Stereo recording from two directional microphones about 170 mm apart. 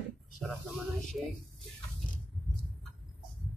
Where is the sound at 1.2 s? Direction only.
5° right (ahead or behind).